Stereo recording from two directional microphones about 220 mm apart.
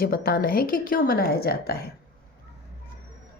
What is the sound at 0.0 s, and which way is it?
A woman's voice, 40° left (ahead or behind).